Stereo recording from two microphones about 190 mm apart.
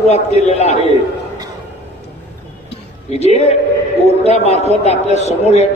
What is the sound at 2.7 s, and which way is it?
Music, 35° left (ahead or behind).